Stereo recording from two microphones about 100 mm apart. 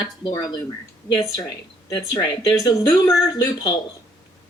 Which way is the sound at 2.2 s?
40° left (ahead or behind).